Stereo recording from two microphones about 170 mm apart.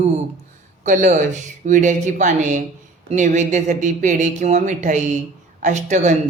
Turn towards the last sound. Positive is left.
turn(degrees=-45)  # may be behind; listen again after turning